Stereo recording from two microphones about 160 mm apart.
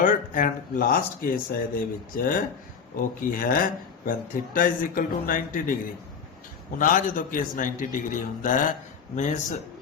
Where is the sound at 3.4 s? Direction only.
60° left (ahead or behind).